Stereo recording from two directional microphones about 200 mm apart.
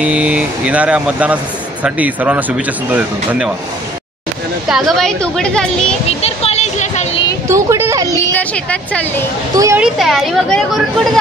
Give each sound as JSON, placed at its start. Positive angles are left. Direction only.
{"t": 0.0, "sound": "speech", "side_deg": -5}
{"t": 4.6, "sound": "a woman's voice", "side_deg": 0}
{"t": 6.0, "sound": "a sound", "side_deg": 30}
{"t": 7.4, "sound": "speech", "side_deg": -15}
{"t": 8.1, "sound": "speech", "side_deg": 10}
{"t": 9.6, "sound": "speech", "side_deg": -15}
{"t": 9.9, "sound": "a woman's voice", "side_deg": 0}